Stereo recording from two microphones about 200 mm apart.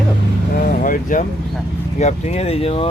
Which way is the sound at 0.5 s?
45° left (ahead or behind).